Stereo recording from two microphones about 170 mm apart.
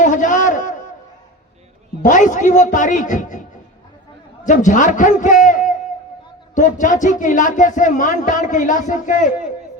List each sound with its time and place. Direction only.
0.0 s a sound: 50° left (ahead or behind)
2.0 s speech: 50° left (ahead or behind)
4.4 s speech: 50° left (ahead or behind)